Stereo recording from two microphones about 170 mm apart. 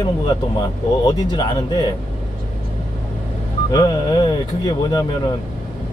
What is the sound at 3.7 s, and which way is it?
Speech, 25° left (ahead or behind).